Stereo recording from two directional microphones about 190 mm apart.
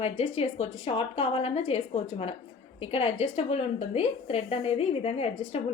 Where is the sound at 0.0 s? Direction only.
35° left (ahead or behind).